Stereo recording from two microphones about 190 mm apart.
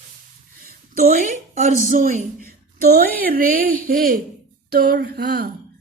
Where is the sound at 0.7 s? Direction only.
45° right (ahead or behind).